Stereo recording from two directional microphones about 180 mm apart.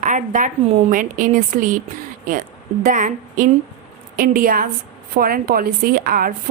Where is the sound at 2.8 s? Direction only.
45° right (ahead or behind).